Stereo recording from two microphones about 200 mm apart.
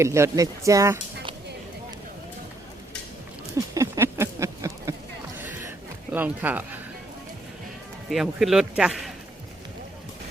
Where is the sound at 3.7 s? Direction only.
15° right (ahead or behind).